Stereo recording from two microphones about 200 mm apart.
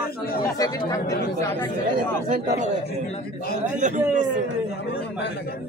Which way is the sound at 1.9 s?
45° right (ahead or behind).